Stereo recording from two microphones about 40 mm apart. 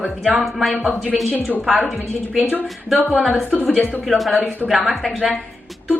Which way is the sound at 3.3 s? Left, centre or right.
Right.